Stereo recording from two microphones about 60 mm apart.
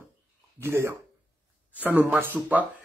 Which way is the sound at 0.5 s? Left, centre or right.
Right.